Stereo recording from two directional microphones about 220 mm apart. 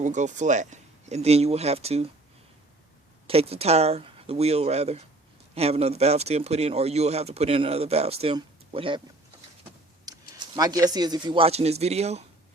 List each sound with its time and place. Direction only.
0.0 s speech: 35° right (ahead or behind)
3.2 s speech: 25° right (ahead or behind)
10.1 s speech: 20° right (ahead or behind)